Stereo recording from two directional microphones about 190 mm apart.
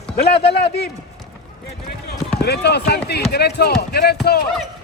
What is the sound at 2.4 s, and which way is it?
Speech, 60° left (ahead or behind).